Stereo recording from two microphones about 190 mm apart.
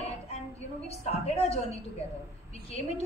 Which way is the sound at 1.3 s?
30° left (ahead or behind).